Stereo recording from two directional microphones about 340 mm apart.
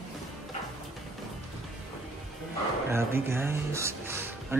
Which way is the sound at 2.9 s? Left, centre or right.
Centre.